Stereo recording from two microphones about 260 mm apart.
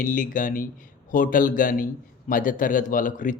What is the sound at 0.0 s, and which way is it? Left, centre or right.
Speech, left.